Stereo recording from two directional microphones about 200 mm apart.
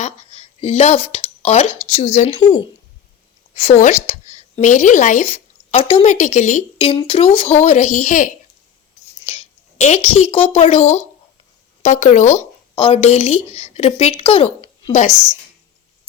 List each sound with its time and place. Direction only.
0.0 s a woman's voice: 30° left (ahead or behind)
3.5 s a woman's voice: 30° left (ahead or behind)
9.2 s a sound: 35° left (ahead or behind)
10.5 s a woman's voice: 30° left (ahead or behind)
14.9 s a woman's voice: 35° left (ahead or behind)